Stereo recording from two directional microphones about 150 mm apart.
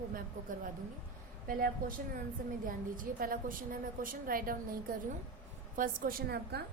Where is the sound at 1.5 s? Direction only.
70° right (ahead or behind).